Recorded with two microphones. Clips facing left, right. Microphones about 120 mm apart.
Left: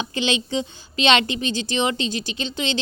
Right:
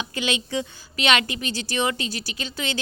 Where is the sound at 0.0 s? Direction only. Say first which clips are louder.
Left 3 dB; 25° left (ahead or behind).